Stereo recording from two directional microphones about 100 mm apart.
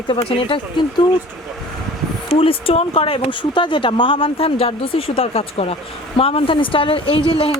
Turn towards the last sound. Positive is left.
turn(degrees=65)  # may be behind; listen again after turning